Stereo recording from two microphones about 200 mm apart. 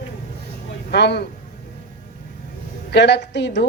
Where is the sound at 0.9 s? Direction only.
55° left (ahead or behind).